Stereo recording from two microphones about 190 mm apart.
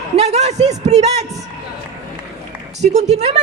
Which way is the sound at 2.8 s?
35° right (ahead or behind).